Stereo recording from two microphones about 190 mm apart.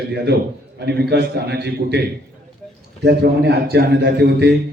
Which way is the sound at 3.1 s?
60° right (ahead or behind).